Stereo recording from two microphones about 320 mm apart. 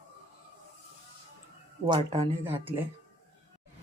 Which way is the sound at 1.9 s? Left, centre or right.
Centre.